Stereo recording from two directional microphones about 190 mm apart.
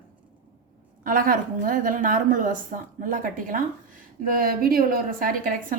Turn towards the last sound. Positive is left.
turn(degrees=-45)  # may be behind; listen again after turning